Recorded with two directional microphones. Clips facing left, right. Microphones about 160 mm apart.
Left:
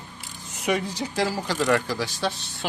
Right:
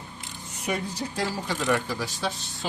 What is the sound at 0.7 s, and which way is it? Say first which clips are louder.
Speech: left 4 dB; 90° left.